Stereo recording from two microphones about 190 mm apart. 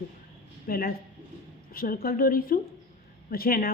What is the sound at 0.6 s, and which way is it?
A woman's voice, 50° left (ahead or behind).